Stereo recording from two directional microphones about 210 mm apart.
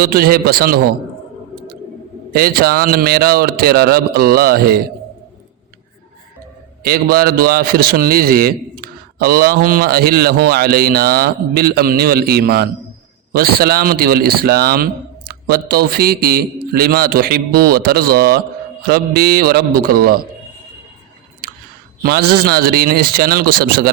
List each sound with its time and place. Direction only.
0.0 s a man's voice: 45° right (ahead or behind)
2.3 s a man's voice: 45° right (ahead or behind)
6.8 s a man's voice: 45° right (ahead or behind)
22.0 s a man's voice: 45° right (ahead or behind)